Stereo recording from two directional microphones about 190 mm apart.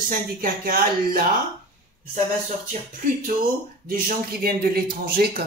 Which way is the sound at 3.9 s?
55° right (ahead or behind).